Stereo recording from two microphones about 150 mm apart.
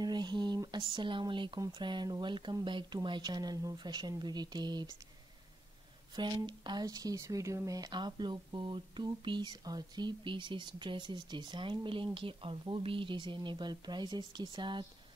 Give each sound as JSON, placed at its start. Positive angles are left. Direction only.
{"t": 0.0, "sound": "speech", "side_deg": -30}
{"t": 6.1, "sound": "speech", "side_deg": -30}